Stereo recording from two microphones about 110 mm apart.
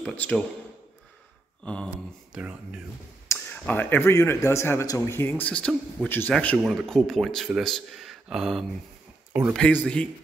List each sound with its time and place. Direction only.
0.0 s speech: 10° left (ahead or behind)
1.6 s speech: 10° left (ahead or behind)
1.9 s speech: 10° right (ahead or behind)
3.3 s speech: 15° left (ahead or behind)
6.0 s speech: 20° left (ahead or behind)
6.6 s speech: centre (ahead or behind)
9.6 s speech: 15° left (ahead or behind)